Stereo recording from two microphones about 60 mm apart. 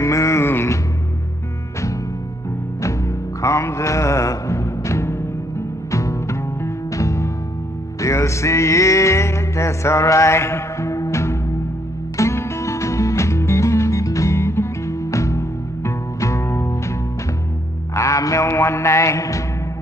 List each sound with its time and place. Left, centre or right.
0.0 s music: left
2.8 s music: left
17.9 s music: left